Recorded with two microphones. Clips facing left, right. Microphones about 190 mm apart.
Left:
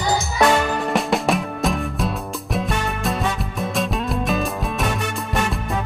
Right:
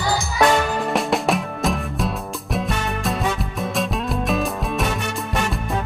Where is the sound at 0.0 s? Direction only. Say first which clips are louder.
Left 1 dB; 20° left (ahead or behind).